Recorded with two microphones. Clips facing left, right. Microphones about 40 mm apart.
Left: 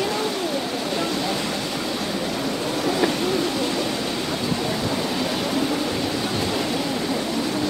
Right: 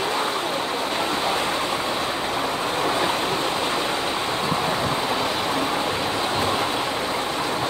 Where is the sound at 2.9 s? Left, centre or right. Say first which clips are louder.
Left 3 dB; right.